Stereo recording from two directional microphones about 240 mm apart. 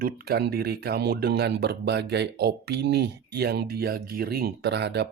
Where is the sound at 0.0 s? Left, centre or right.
Right.